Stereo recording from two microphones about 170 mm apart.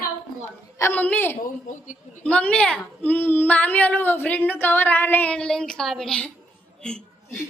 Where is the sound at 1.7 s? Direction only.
50° left (ahead or behind).